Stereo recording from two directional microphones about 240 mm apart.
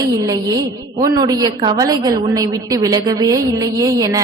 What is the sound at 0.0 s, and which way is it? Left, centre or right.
A woman's voice, centre.